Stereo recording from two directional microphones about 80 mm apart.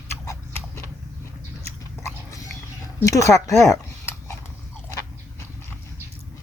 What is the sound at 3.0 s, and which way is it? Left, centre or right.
Speech, left.